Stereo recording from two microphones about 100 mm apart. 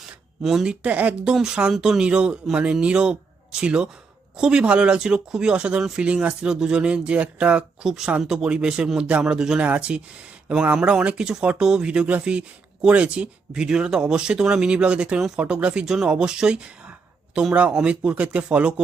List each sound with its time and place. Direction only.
0.4 s speech: 5° right (ahead or behind)